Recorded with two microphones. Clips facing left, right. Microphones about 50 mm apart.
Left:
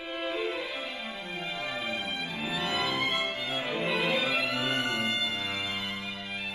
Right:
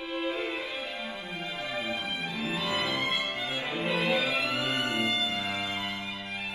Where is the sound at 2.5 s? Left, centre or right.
Left.